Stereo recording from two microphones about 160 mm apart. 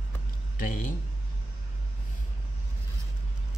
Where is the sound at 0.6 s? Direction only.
60° left (ahead or behind).